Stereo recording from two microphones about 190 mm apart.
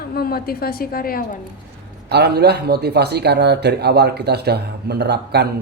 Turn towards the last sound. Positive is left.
turn(degrees=-60)  # may be behind; listen again after turning